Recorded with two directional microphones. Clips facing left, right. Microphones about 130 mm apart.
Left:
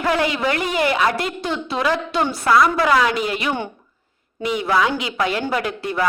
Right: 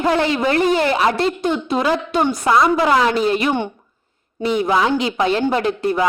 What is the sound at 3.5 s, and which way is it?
Speech, 20° right (ahead or behind).